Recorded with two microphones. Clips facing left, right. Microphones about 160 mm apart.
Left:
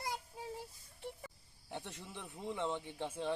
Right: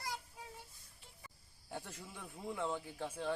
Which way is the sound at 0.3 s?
30° left (ahead or behind).